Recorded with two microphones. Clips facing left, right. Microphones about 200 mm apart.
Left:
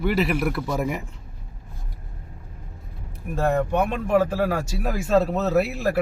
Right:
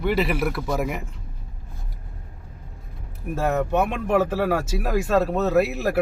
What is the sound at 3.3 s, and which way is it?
Speech, 5° right (ahead or behind).